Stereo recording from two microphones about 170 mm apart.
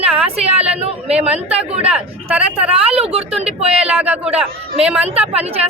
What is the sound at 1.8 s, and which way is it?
Speech, 5° right (ahead or behind).